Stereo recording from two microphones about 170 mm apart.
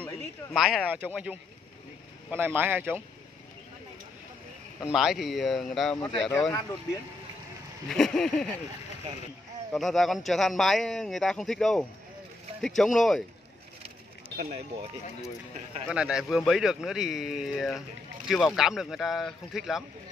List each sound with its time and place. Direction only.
0.5 s speech: centre (ahead or behind)
4.9 s speech: centre (ahead or behind)
7.9 s speech: 5° left (ahead or behind)
9.7 s speech: centre (ahead or behind)
14.3 s speech: 65° right (ahead or behind)
15.9 s speech: 5° right (ahead or behind)